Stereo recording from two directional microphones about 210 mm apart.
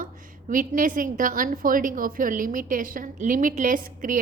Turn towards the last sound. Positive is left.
turn(degrees=-40)  # may be behind; listen again after turning